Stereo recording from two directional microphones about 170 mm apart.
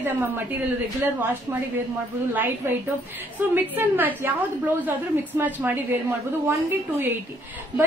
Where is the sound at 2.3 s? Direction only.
10° right (ahead or behind).